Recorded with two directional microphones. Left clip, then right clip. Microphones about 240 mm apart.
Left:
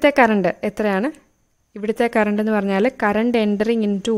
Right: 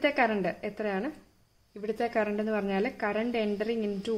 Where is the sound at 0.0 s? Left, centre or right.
Left.